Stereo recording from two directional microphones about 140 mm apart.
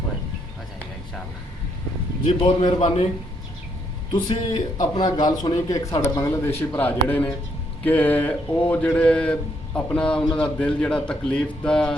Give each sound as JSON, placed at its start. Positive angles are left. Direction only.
{"t": 2.4, "sound": "a man's voice", "side_deg": 40}
{"t": 4.1, "sound": "a man's voice", "side_deg": 35}